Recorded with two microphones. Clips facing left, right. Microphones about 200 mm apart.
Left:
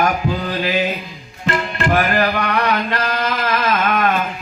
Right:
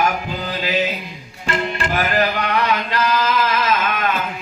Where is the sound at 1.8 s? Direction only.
50° left (ahead or behind).